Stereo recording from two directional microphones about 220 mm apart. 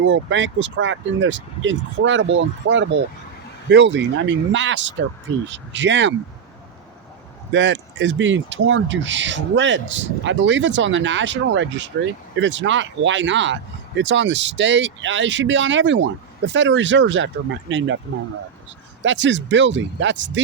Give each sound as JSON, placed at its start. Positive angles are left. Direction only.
{"t": 0.0, "sound": "speech", "side_deg": -55}
{"t": 7.5, "sound": "speech", "side_deg": -55}
{"t": 19.0, "sound": "speech", "side_deg": -55}